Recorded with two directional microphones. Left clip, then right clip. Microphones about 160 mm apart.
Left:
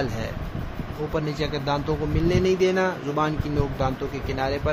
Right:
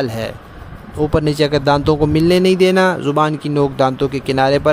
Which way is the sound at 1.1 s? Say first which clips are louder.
Right 12 dB; 90° right.